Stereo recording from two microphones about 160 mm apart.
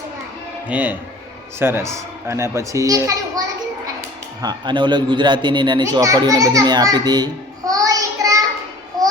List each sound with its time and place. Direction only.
0.7 s a child's voice: 10° right (ahead or behind)
7.7 s child singing: 20° right (ahead or behind)